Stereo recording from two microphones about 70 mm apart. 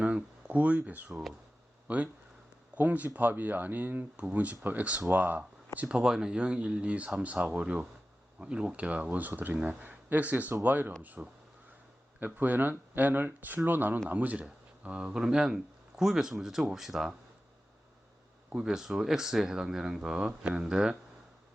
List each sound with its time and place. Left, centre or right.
0.0 s a sound: centre
1.1 s speech: centre
1.9 s speech: right; by 17.2 s centre
18.5 s speech: centre